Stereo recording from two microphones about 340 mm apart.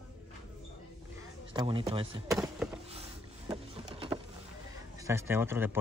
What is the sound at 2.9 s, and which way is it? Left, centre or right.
Vehicle, centre.